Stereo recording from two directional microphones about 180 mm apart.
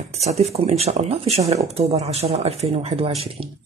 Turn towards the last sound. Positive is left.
turn(degrees=-30)  # may be behind; listen again after turning